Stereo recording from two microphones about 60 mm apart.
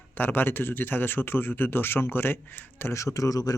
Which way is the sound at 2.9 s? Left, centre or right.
Left.